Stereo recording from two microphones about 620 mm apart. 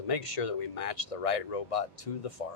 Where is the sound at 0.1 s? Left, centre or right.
Left.